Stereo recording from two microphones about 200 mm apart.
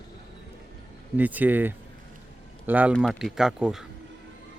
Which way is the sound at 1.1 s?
10° right (ahead or behind).